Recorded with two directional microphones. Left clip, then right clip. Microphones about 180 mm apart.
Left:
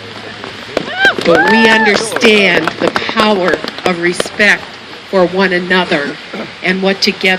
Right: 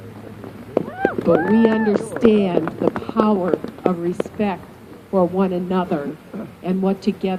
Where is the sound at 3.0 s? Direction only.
45° left (ahead or behind).